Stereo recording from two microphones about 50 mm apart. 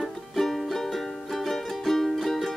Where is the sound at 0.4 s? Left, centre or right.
Centre.